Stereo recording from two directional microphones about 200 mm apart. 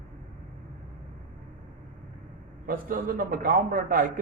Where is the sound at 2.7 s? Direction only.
45° right (ahead or behind).